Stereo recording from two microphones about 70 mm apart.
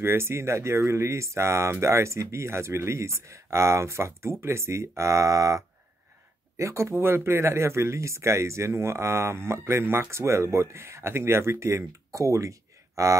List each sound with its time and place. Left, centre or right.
0.0 s speech: right